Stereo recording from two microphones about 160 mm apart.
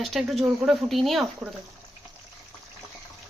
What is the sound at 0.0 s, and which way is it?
A woman's voice, centre (ahead or behind).